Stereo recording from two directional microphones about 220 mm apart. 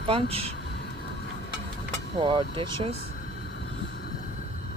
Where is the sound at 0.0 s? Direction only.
25° right (ahead or behind).